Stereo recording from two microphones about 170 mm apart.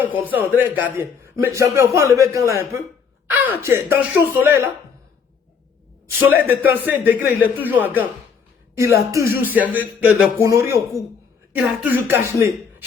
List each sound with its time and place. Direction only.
0.0 s a man's voice: 10° right (ahead or behind)
6.1 s a man's voice: 10° right (ahead or behind)